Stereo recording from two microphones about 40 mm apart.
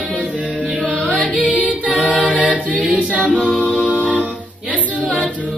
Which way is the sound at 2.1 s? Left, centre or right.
Right.